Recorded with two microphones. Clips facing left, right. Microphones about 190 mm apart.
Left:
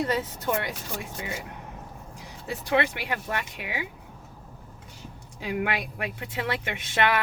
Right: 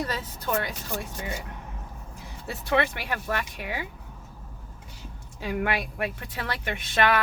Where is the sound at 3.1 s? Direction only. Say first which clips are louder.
Right 1 dB; 20° left (ahead or behind).